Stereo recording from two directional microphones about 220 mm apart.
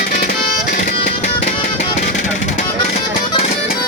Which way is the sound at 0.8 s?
35° left (ahead or behind).